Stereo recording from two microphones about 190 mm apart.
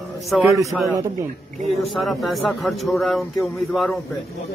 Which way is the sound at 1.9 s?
Centre (ahead or behind).